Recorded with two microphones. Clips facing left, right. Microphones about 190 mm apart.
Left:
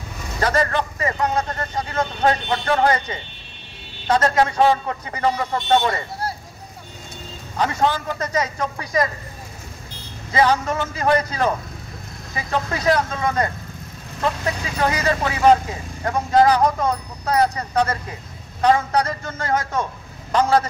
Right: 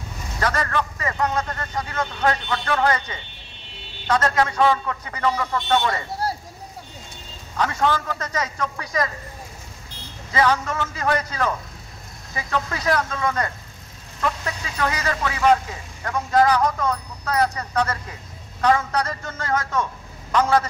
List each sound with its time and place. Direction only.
0.4 s speech: 30° left (ahead or behind)
1.6 s speech: 35° left (ahead or behind)
8.2 s speech: 20° left (ahead or behind)
10.3 s a man's voice: 35° left (ahead or behind)